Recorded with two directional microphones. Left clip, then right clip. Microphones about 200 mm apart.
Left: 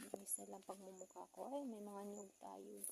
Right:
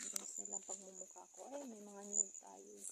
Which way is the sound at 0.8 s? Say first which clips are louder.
Even; 10° left (ahead or behind).